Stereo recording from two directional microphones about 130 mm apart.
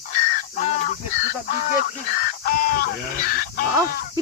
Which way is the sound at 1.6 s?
90° left.